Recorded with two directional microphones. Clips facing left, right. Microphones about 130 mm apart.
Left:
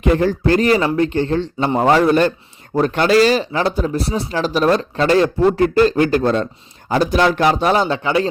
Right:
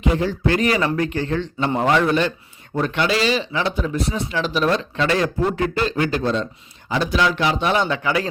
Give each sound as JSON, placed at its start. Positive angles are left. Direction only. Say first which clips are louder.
{"t": 0.0, "sound": "speech", "louder": "left 5 dB", "side_deg": 50}